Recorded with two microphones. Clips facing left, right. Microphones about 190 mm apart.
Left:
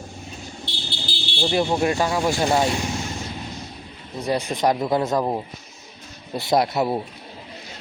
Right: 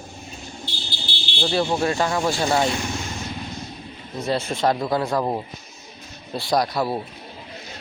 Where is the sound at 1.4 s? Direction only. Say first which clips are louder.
Left 1 dB; 15° left (ahead or behind).